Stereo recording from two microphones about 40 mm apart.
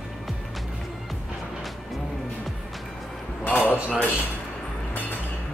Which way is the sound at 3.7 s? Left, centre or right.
Right.